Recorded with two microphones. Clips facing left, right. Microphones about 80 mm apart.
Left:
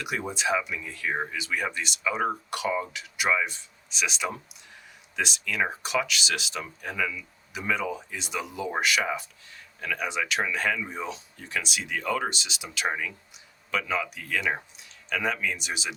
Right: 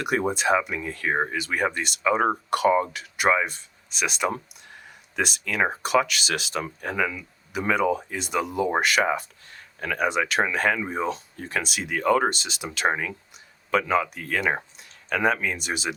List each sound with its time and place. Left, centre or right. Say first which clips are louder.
0.0 s speech: right 6 dB; right